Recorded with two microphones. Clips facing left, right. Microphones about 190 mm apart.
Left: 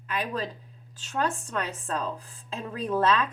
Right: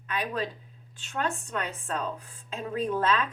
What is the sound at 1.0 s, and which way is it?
Speech, 35° left (ahead or behind).